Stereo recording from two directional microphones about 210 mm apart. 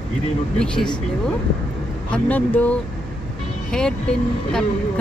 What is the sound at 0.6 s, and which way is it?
Speech, 5° left (ahead or behind).